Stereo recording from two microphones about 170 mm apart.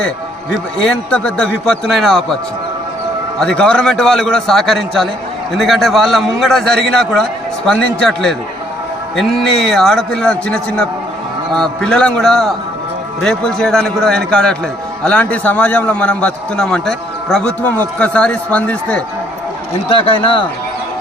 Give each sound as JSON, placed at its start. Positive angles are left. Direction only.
{"t": 0.8, "sound": "a man's voice", "side_deg": 5}
{"t": 3.4, "sound": "a man's voice", "side_deg": 5}
{"t": 9.4, "sound": "a man's voice", "side_deg": 0}
{"t": 19.9, "sound": "speech", "side_deg": 30}